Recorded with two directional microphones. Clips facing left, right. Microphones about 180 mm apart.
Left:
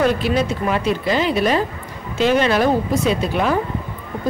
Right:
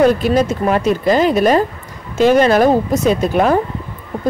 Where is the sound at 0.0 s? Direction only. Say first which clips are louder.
Right 5 dB; 45° right (ahead or behind).